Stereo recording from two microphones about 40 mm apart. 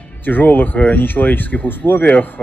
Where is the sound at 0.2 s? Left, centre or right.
Left.